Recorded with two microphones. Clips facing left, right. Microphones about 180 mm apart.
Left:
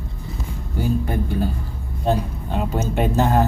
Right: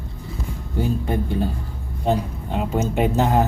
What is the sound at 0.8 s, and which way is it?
Speech, 25° right (ahead or behind).